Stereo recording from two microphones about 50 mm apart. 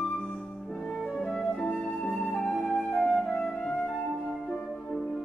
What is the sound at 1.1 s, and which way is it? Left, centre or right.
Flute, centre.